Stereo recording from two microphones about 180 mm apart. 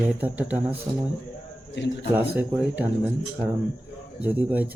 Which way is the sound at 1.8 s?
75° left (ahead or behind).